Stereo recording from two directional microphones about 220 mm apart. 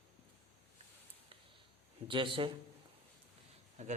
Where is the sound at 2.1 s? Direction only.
25° right (ahead or behind).